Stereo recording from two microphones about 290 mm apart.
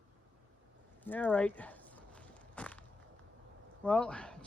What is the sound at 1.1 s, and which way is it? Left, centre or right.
Walk, centre.